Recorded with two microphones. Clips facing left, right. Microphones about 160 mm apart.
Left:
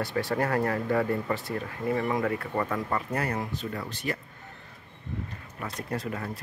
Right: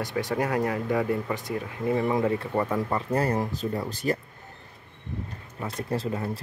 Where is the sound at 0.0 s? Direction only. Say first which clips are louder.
Even; 15° right (ahead or behind).